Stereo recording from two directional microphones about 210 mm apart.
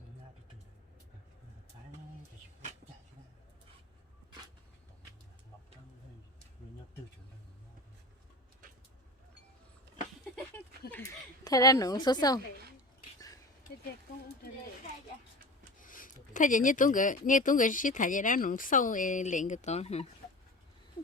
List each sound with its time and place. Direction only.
10.5 s a sound: 10° left (ahead or behind)
11.4 s a woman's voice: 15° left (ahead or behind)
15.8 s speech: 40° left (ahead or behind)